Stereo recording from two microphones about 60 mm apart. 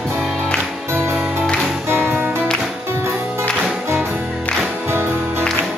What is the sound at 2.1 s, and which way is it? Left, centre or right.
Music, right.